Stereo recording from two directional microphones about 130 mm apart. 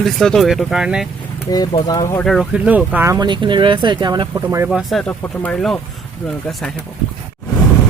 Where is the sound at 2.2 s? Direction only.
Centre (ahead or behind).